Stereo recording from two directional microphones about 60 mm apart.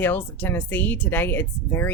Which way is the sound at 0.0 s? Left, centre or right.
Left.